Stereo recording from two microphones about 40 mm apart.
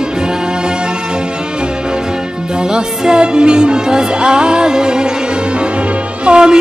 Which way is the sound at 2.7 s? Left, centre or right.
Right.